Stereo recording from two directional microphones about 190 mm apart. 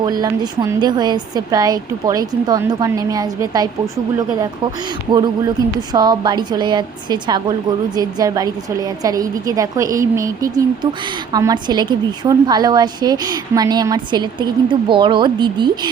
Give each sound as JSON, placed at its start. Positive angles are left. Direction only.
{"t": 0.0, "sound": "a woman's voice", "side_deg": -20}
{"t": 5.9, "sound": "a woman's voice", "side_deg": -20}